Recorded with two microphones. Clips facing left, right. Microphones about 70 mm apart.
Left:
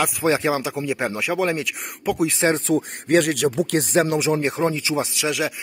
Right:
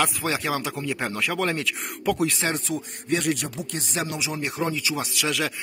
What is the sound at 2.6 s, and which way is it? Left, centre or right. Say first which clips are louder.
Speech: left 9 dB; left.